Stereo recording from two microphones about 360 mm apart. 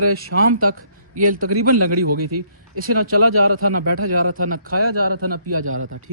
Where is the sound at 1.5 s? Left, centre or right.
Right.